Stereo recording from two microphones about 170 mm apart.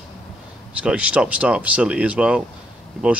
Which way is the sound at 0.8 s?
5° right (ahead or behind).